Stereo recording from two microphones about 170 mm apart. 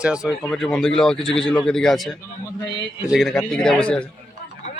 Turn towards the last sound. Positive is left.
turn(degrees=5)  # may be behind; listen again after turning